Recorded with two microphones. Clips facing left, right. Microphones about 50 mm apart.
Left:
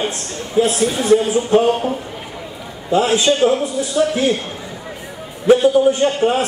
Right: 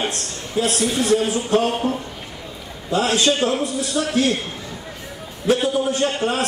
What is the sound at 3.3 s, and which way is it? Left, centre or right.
A man's voice, centre.